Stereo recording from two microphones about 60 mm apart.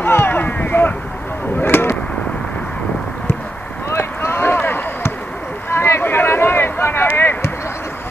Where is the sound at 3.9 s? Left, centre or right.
Left.